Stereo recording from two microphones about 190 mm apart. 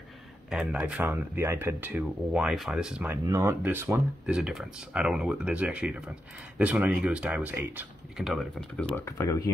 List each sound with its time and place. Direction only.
0.5 s speech: 5° right (ahead or behind)
8.9 s speech: 15° left (ahead or behind)